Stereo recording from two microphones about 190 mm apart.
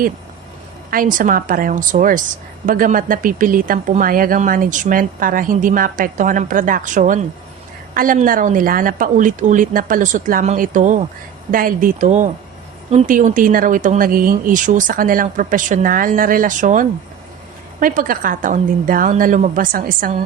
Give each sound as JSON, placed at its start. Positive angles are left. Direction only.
{"t": 0.9, "sound": "a woman's voice", "side_deg": -45}